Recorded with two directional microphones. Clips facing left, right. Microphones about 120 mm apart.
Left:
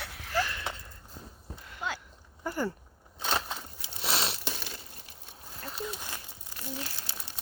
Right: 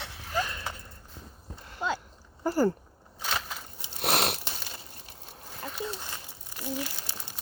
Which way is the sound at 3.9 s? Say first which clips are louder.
Right 5 dB; 60° right (ahead or behind).